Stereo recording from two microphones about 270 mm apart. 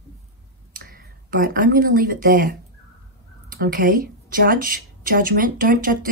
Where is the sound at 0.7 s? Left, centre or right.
Right.